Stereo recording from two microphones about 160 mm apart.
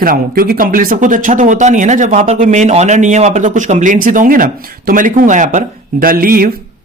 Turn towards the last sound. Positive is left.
turn(degrees=-65)  # may be behind; listen again after turning